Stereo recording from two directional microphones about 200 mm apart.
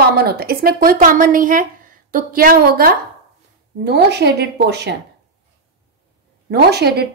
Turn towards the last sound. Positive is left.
turn(degrees=-55)  # may be behind; listen again after turning